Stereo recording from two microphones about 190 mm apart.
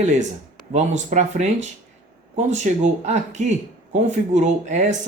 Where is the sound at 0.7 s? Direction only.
40° right (ahead or behind).